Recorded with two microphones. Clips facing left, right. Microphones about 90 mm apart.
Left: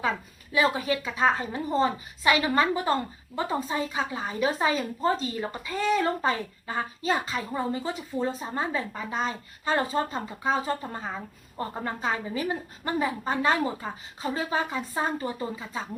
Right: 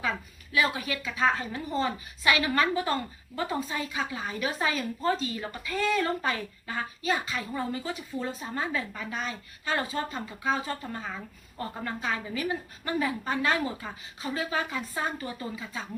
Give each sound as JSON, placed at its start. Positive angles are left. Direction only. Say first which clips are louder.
{"t": 0.5, "sound": "a woman's voice", "louder": "left 4 dB", "side_deg": 30}